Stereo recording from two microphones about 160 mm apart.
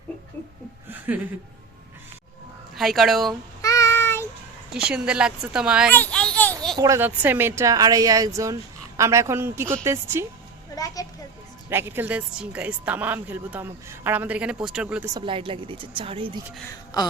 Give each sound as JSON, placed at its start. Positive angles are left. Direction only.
{"t": 0.9, "sound": "a sound", "side_deg": -10}
{"t": 2.7, "sound": "speech", "side_deg": 0}
{"t": 3.6, "sound": "child singing", "side_deg": 20}
{"t": 4.7, "sound": "speech", "side_deg": -5}
{"t": 5.9, "sound": "a sound", "side_deg": 10}
{"t": 6.7, "sound": "a woman's voice", "side_deg": -20}
{"t": 10.8, "sound": "a sound", "side_deg": 20}
{"t": 11.7, "sound": "speech", "side_deg": -15}
{"t": 15.0, "sound": "a woman's voice", "side_deg": -30}